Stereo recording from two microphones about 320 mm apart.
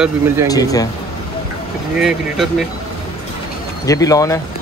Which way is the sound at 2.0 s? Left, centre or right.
Centre.